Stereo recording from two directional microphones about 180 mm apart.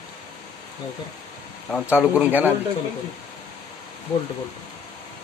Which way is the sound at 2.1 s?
10° right (ahead or behind).